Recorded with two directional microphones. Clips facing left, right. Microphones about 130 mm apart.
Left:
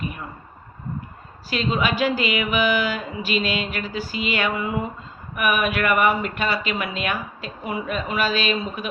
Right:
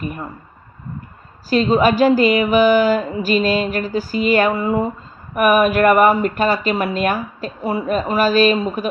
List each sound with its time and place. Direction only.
0.0 s speech: 45° right (ahead or behind)
1.5 s speech: 40° right (ahead or behind)